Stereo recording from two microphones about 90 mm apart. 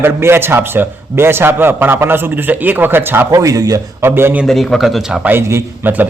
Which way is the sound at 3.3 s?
40° right (ahead or behind).